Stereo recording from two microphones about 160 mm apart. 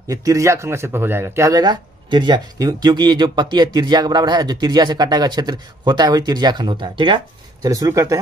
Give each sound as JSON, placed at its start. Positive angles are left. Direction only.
{"t": 0.1, "sound": "speech", "side_deg": -20}